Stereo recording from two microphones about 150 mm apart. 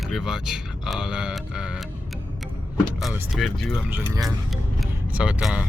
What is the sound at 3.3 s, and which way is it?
Speech, centre (ahead or behind).